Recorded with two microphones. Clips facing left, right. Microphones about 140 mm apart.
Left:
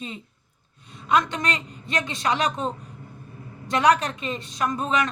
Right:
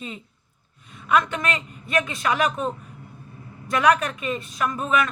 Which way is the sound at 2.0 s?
30° left (ahead or behind).